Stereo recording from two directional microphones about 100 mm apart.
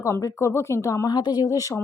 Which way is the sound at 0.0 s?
30° left (ahead or behind).